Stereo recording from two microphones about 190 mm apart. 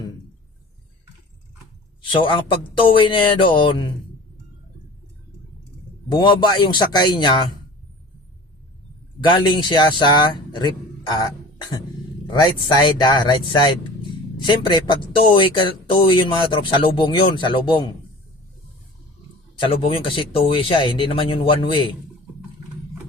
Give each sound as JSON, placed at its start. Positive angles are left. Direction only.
{"t": 2.0, "sound": "speech", "side_deg": 25}
{"t": 6.1, "sound": "speech", "side_deg": 25}
{"t": 9.2, "sound": "speech", "side_deg": 25}
{"t": 12.3, "sound": "speech", "side_deg": 25}
{"t": 19.5, "sound": "speech", "side_deg": 30}